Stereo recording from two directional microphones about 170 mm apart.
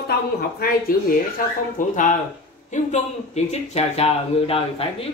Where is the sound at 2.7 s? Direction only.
45° left (ahead or behind).